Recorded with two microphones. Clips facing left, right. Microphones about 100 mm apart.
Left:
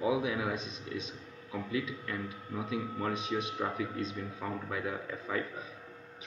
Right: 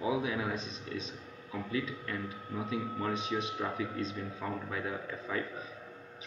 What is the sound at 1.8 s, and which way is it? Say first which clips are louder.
Speech: even; 30° right (ahead or behind).